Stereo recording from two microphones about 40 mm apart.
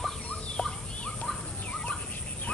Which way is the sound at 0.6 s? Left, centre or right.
Left.